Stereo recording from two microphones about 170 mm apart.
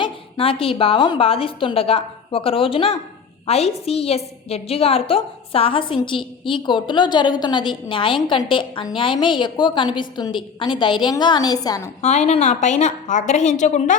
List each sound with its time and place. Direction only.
0.0 s a woman's voice: 35° left (ahead or behind)
12.0 s a woman's voice: 40° left (ahead or behind)